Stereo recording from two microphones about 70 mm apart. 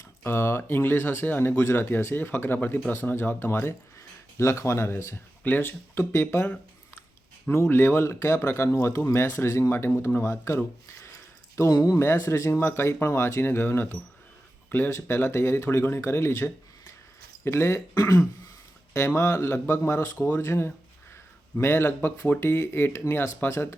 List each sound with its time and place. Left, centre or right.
0.3 s speech: left
5.4 s speech: left
7.5 s speech: left
11.7 s speech: left
11.9 s speech: left
17.9 s speech: left
18.9 s speech: left